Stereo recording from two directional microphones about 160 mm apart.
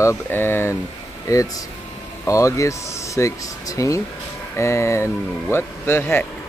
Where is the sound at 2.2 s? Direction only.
20° left (ahead or behind).